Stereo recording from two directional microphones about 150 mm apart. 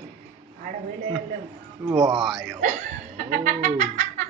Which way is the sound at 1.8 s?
25° right (ahead or behind).